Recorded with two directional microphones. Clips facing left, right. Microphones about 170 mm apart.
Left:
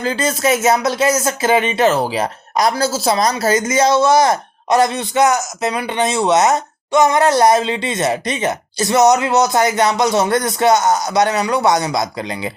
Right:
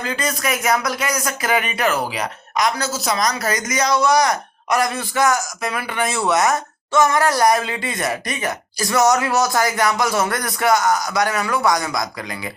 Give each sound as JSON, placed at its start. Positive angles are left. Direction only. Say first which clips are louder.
{"t": 0.0, "sound": "speech", "louder": "left 6 dB", "side_deg": 30}